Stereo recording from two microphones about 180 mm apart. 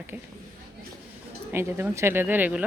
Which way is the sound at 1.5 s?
15° right (ahead or behind).